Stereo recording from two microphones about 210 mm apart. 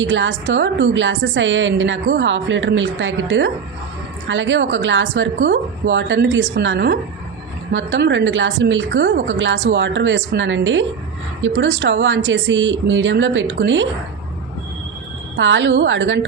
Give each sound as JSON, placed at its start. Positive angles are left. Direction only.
{"t": 0.0, "sound": "a woman's voice", "side_deg": -65}
{"t": 15.4, "sound": "a woman's voice", "side_deg": -60}